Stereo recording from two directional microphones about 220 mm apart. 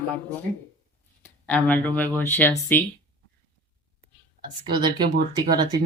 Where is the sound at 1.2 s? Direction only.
5° left (ahead or behind).